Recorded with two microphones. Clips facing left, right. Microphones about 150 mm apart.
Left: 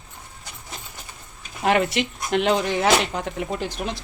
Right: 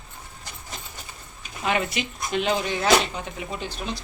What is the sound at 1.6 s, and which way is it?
Speech, 65° left (ahead or behind).